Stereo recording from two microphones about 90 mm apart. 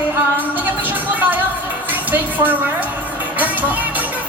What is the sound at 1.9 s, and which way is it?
Music, 20° right (ahead or behind).